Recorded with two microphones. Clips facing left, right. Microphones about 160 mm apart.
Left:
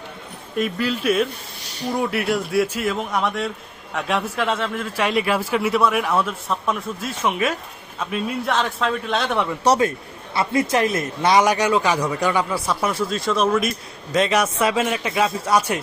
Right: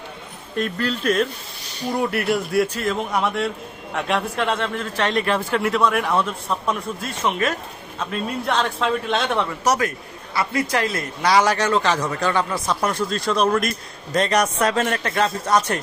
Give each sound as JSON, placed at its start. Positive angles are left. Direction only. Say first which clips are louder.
{"t": 0.5, "sound": "speech", "louder": "left 1 dB", "side_deg": 5}
{"t": 9.6, "sound": "speech", "louder": "left 5 dB", "side_deg": 30}